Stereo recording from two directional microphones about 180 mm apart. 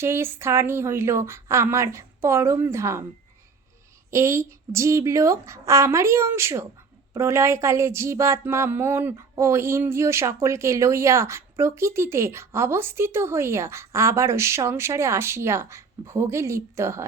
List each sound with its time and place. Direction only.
0.0 s speech: 15° right (ahead or behind)
4.1 s speech: 15° right (ahead or behind)